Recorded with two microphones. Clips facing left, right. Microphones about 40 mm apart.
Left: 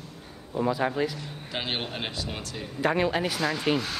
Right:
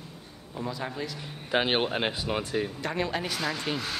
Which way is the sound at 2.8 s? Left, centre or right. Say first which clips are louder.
Left 5 dB; centre.